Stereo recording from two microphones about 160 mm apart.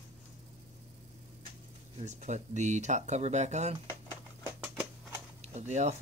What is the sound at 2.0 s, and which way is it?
Speech, 50° right (ahead or behind).